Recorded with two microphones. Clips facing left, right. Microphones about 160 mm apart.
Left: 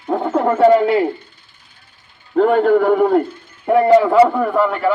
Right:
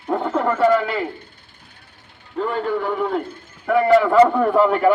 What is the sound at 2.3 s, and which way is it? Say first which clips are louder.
Speech: left 10 dB; 60° left (ahead or behind).